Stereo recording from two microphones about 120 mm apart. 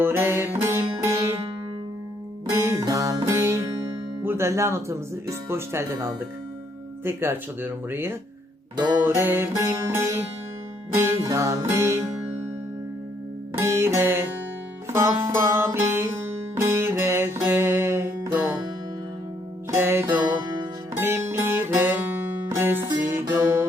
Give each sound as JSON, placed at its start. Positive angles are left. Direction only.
{"t": 0.0, "sound": "music", "side_deg": -20}
{"t": 2.5, "sound": "music", "side_deg": -25}
{"t": 4.2, "sound": "speech", "side_deg": -20}
{"t": 5.5, "sound": "music", "side_deg": -20}
{"t": 8.7, "sound": "music", "side_deg": -35}
{"t": 9.0, "sound": "music", "side_deg": -15}
{"t": 13.6, "sound": "music", "side_deg": -20}
{"t": 19.7, "sound": "music", "side_deg": -20}
{"t": 20.2, "sound": "music", "side_deg": -35}
{"t": 20.9, "sound": "music", "side_deg": -20}